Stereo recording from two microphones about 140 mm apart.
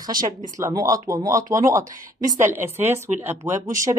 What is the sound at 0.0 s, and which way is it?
Speech, 30° right (ahead or behind).